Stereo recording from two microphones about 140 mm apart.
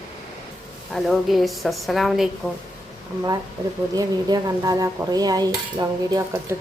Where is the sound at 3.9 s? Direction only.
25° right (ahead or behind).